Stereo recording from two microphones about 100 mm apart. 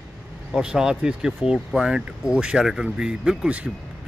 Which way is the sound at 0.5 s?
5° right (ahead or behind).